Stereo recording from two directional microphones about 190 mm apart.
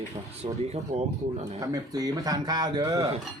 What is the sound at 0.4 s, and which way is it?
Speech, 35° right (ahead or behind).